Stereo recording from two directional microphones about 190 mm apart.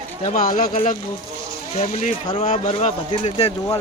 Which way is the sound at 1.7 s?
35° left (ahead or behind).